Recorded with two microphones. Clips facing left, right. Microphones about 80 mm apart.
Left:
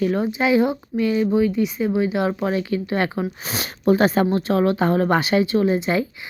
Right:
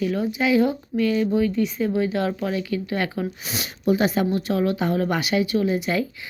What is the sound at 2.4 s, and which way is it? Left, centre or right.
Speech, left.